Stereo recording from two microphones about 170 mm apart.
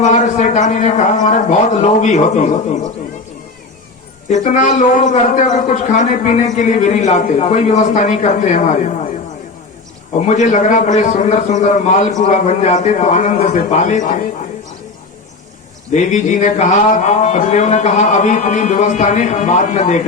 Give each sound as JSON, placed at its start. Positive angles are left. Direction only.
{"t": 0.0, "sound": "a man's voice", "side_deg": 45}
{"t": 4.3, "sound": "a man's voice", "side_deg": 45}
{"t": 10.2, "sound": "a man's voice", "side_deg": 45}
{"t": 15.9, "sound": "a man's voice", "side_deg": 45}